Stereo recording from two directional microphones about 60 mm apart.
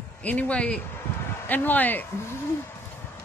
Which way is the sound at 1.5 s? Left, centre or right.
Left.